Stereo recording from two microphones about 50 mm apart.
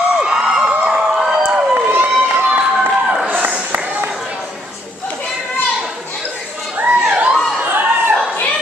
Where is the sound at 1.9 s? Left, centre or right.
Right.